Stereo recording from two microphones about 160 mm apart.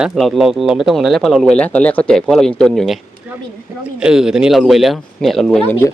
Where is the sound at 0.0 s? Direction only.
Centre (ahead or behind).